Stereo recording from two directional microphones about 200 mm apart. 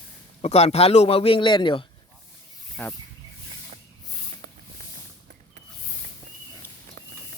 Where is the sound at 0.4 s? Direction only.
30° left (ahead or behind).